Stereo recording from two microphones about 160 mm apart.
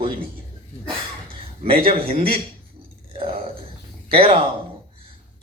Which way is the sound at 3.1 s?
35° right (ahead or behind).